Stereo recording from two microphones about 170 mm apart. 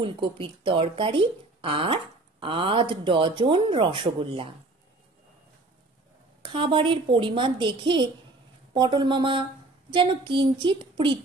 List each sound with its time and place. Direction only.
0.0 s speech: 30° right (ahead or behind)
6.4 s a woman's voice: 30° right (ahead or behind)